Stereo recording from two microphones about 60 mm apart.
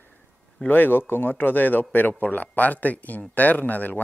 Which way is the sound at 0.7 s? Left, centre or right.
Left.